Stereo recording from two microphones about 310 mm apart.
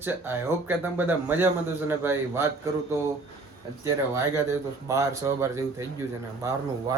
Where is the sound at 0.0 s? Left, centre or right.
Centre.